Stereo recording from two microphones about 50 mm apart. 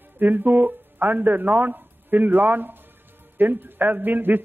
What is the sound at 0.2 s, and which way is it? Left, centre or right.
A man's voice, right.